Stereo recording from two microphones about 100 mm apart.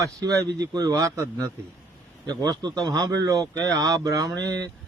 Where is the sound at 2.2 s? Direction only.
45° right (ahead or behind).